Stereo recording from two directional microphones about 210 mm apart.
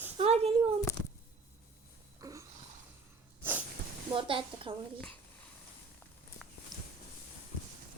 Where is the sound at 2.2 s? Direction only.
15° right (ahead or behind).